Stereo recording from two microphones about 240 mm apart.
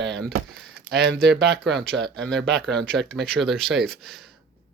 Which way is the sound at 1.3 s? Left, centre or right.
Right.